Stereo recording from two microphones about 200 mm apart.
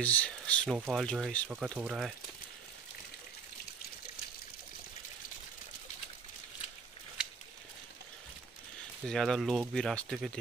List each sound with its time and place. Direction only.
0.0 s speech: 5° left (ahead or behind)
9.0 s speech: centre (ahead or behind)